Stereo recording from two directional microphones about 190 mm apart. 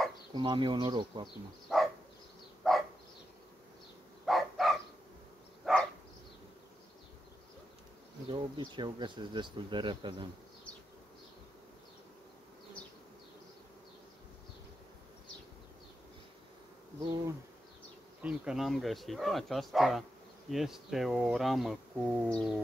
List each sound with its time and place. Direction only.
0.3 s speech: 25° right (ahead or behind)
2.6 s dog: centre (ahead or behind)
4.3 s dog: centre (ahead or behind)
8.3 s speech: 25° right (ahead or behind)
17.0 s insect: 20° right (ahead or behind)
18.2 s speech: 5° right (ahead or behind)